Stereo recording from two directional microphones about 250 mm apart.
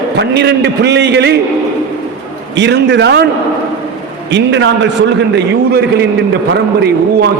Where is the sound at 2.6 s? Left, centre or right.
Right.